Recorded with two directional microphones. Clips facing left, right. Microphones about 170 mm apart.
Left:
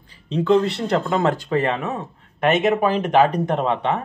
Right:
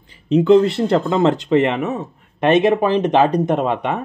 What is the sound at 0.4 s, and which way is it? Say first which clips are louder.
A man's voice: right 5 dB; 25° right (ahead or behind).